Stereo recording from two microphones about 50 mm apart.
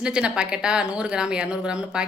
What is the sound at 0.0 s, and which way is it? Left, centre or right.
A woman's voice, centre.